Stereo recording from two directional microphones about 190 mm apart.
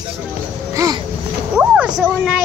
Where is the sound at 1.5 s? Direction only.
5° right (ahead or behind).